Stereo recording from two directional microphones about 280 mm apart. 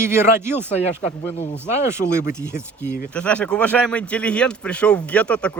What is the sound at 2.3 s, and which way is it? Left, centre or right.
Speech, centre.